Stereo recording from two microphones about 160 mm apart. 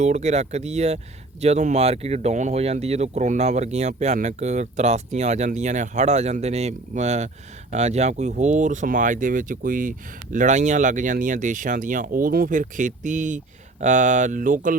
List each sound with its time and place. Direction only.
0.0 s speech: 45° right (ahead or behind)